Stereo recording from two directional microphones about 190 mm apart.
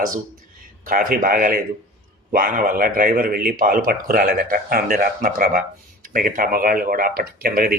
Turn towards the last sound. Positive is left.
turn(degrees=-50)  # may be behind; listen again after turning